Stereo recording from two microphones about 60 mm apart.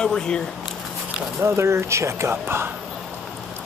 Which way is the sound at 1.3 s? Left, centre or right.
Right.